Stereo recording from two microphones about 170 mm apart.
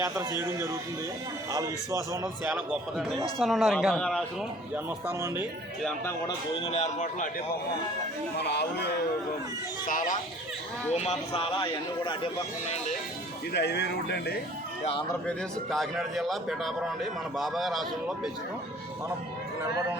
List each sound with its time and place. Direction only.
0.0 s a man's voice: 15° right (ahead or behind)
2.4 s a man's voice: 5° right (ahead or behind)
4.7 s a man's voice: 15° right (ahead or behind)
6.5 s speech: 35° left (ahead or behind)
8.4 s speech: 80° left
10.9 s a man's voice: 40° left (ahead or behind)
13.5 s speech: 75° left (ahead or behind)
15.3 s a man's voice: centre (ahead or behind)